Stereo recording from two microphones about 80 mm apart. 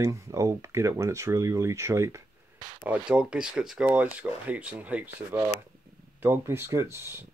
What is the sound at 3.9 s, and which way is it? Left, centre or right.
Speech, centre.